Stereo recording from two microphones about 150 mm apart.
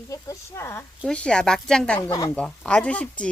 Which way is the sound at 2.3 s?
5° left (ahead or behind).